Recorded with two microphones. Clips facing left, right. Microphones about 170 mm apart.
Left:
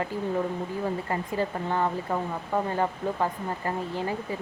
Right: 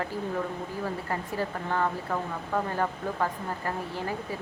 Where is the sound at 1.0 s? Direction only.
15° left (ahead or behind).